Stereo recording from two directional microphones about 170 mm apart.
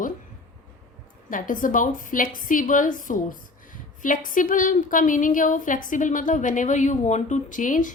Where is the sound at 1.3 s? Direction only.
50° left (ahead or behind).